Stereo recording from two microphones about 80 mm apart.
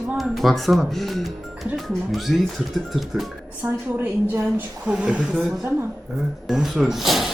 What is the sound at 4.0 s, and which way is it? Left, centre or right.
Speech, right.